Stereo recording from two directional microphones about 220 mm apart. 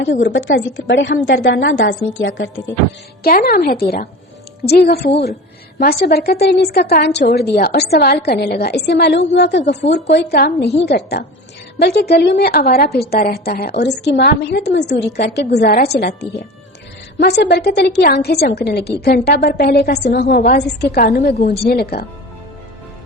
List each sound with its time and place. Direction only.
0.0 s a woman's voice: 50° left (ahead or behind)
3.2 s a woman's voice: 40° left (ahead or behind)
17.2 s a woman's voice: 45° left (ahead or behind)